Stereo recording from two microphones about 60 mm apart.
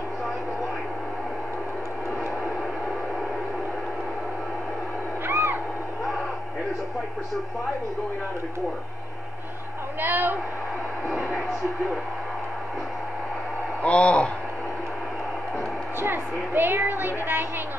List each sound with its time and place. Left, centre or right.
5.2 s owl: right
9.9 s a woman's voice: right
13.8 s speech: centre
16.0 s a woman's voice: right